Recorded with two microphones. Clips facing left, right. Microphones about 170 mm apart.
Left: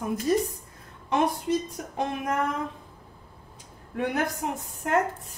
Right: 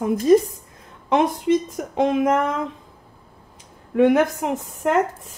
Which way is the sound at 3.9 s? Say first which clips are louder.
Right 12 dB; 90° right.